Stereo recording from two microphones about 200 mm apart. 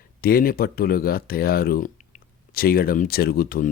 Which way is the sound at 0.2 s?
50° left (ahead or behind).